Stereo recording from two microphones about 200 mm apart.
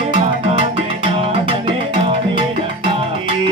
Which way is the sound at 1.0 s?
30° right (ahead or behind).